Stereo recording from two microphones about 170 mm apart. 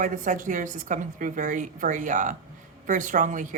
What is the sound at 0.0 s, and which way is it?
A woman's voice, 50° right (ahead or behind).